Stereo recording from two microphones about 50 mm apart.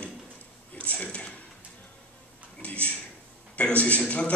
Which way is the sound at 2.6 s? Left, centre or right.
Left.